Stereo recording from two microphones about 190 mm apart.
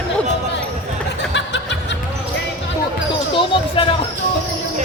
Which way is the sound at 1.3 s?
65° left (ahead or behind).